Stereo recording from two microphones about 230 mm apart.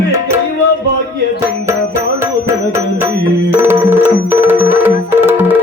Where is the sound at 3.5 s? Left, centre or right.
Centre.